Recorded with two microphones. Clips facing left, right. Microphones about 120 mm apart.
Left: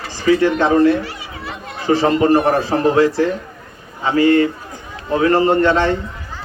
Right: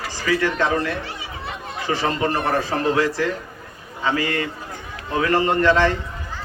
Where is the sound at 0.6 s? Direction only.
40° left (ahead or behind).